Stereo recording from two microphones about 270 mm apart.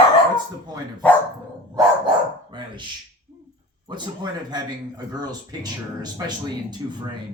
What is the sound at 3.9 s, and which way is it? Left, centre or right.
Speech, centre.